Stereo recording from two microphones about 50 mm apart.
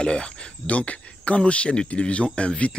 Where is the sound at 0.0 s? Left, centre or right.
Centre.